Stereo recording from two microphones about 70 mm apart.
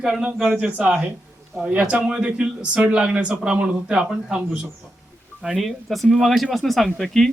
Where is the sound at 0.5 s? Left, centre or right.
Centre.